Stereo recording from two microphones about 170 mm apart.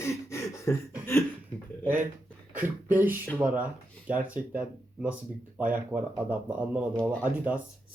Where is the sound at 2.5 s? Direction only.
10° right (ahead or behind).